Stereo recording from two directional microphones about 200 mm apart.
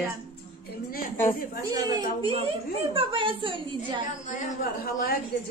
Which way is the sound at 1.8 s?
20° right (ahead or behind).